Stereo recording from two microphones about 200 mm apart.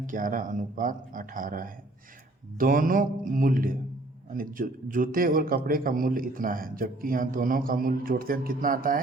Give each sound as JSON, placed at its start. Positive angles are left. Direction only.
{"t": 0.0, "sound": "a man's voice", "side_deg": -40}